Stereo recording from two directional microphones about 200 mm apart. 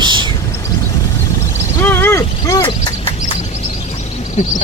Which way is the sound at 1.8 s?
10° left (ahead or behind).